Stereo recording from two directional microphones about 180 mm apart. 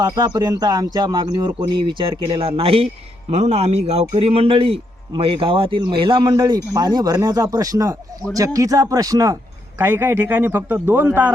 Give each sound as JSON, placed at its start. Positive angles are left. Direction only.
{"t": 0.0, "sound": "speech", "side_deg": -20}